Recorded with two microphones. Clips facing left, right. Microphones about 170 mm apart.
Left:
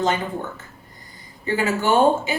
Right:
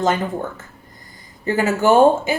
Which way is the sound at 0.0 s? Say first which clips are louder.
Right 3 dB; 45° right (ahead or behind).